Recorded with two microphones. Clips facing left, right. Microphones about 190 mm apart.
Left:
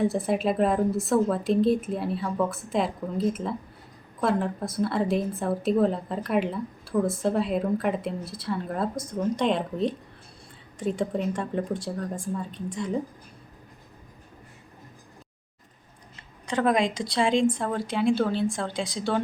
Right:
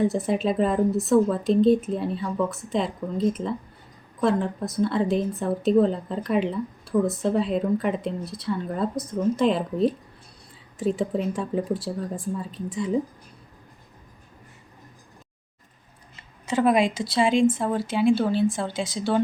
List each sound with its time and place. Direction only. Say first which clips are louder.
0.0 s a woman's voice: right 1 dB; centre (ahead or behind)
16.5 s a woman's voice: right 3 dB; 5° right (ahead or behind)